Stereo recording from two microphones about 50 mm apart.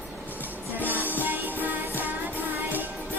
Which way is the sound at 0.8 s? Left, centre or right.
Right.